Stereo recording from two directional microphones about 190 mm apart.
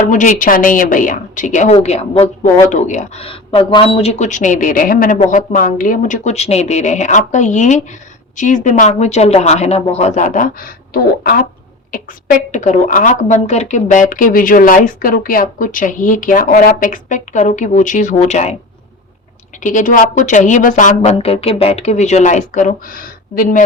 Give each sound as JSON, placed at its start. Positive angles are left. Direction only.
{"t": 0.1, "sound": "speech", "side_deg": 45}
{"t": 19.5, "sound": "speech", "side_deg": 45}